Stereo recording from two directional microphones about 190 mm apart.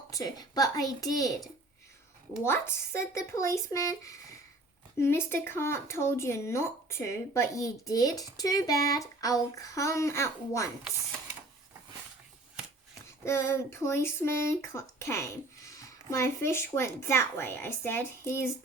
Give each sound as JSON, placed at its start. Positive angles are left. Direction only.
{"t": 0.1, "sound": "a child's voice", "side_deg": 20}
{"t": 13.2, "sound": "speech", "side_deg": 15}